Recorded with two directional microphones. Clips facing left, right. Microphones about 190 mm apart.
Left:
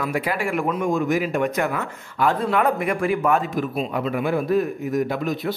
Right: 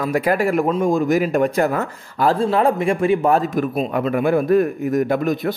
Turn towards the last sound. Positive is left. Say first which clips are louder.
# right 5 dB
turn(degrees=-50)  # may be behind; listen again after turning